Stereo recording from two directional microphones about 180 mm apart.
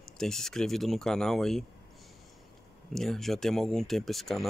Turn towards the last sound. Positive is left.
turn(degrees=0)  # may be behind; listen again after turning